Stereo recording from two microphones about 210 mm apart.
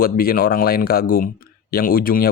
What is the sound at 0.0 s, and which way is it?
Speech, 45° left (ahead or behind).